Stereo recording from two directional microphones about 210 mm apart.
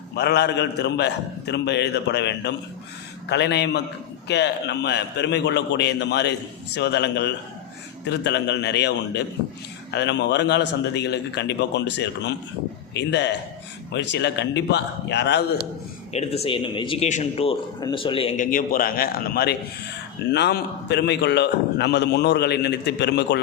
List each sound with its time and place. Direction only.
0.2 s a man's voice: 55° left (ahead or behind)
16.1 s a man's voice: 30° left (ahead or behind)
18.3 s a man's voice: 40° left (ahead or behind)